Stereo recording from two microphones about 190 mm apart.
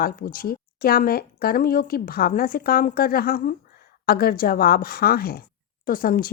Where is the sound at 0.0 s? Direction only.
50° left (ahead or behind).